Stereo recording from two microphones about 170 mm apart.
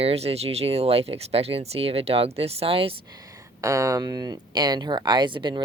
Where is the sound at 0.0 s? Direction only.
35° right (ahead or behind).